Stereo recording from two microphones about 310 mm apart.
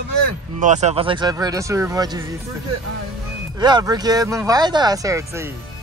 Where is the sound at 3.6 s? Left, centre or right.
Centre.